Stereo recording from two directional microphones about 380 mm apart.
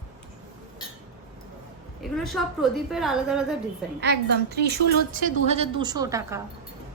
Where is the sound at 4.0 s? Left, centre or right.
Right; by 6.4 s centre.